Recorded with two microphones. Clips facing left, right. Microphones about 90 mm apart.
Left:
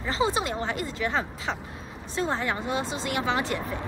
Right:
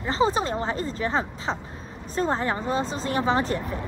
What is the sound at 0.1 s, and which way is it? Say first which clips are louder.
Speech: right 3 dB; 35° right (ahead or behind).